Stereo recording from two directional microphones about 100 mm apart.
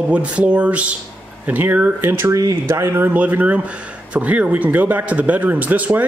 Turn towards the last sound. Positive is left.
turn(degrees=-15)  # may be behind; listen again after turning